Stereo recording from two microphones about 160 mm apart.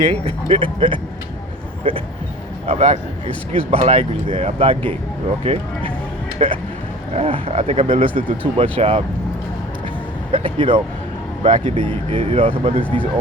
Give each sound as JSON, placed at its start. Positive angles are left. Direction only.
{"t": 0.0, "sound": "a man's voice", "side_deg": -30}
{"t": 10.3, "sound": "speech", "side_deg": -35}
{"t": 11.4, "sound": "speech", "side_deg": -45}
{"t": 12.8, "sound": "speech", "side_deg": 10}